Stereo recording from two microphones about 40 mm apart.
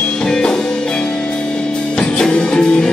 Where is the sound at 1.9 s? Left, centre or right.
Left.